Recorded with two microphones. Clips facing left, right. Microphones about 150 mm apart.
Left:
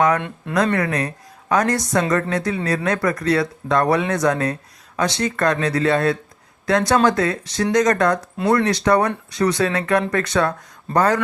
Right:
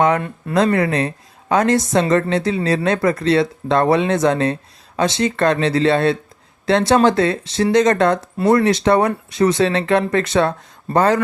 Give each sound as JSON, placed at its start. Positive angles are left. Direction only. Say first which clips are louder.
{"t": 0.2, "sound": "speech", "louder": "right 2 dB", "side_deg": 0}
{"t": 0.5, "sound": "speech", "louder": "right 3 dB", "side_deg": -25}